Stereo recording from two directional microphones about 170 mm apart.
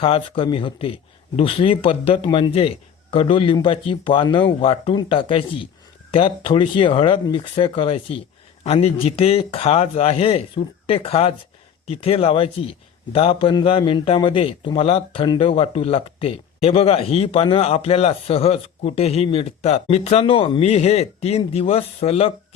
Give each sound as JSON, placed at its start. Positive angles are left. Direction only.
{"t": 0.0, "sound": "a man's voice", "side_deg": 30}